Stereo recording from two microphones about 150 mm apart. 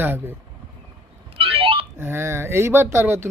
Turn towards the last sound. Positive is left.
turn(degrees=-15)  # may be behind; listen again after turning